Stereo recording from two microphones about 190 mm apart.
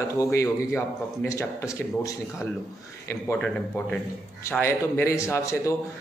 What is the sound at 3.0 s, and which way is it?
A man's voice, 10° left (ahead or behind).